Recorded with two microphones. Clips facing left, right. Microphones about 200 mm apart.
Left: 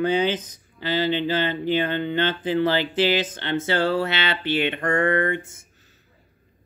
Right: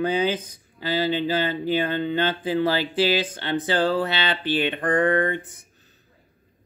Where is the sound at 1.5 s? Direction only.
10° right (ahead or behind).